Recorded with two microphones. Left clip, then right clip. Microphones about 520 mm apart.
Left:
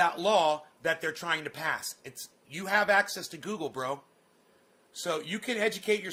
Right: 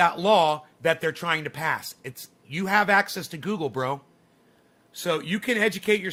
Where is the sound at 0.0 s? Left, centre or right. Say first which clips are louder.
Right 5 dB; centre.